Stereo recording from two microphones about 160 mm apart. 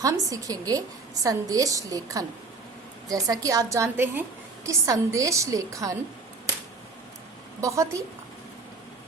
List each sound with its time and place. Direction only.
0.0 s a woman's voice: 20° right (ahead or behind)
7.6 s a woman's voice: 20° right (ahead or behind)